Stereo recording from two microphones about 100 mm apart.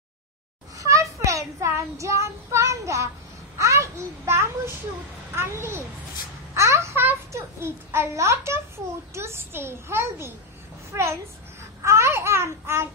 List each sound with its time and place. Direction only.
0.7 s child singing: 30° right (ahead or behind)
3.5 s a child's voice: 30° right (ahead or behind)